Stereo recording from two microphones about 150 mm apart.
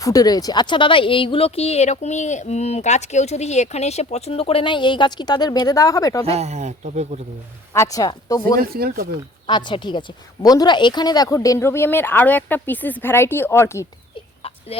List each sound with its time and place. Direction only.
0.0 s speech: 25° left (ahead or behind)
6.2 s speech: 45° right (ahead or behind)
7.7 s speech: 20° left (ahead or behind)
8.5 s speech: 80° right
9.5 s speech: 30° left (ahead or behind)